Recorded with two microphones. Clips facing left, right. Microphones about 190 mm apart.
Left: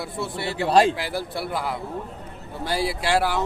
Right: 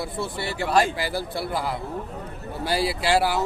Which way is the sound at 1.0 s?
Centre (ahead or behind).